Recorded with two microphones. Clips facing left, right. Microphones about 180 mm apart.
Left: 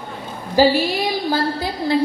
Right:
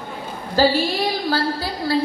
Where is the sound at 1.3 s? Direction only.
20° left (ahead or behind).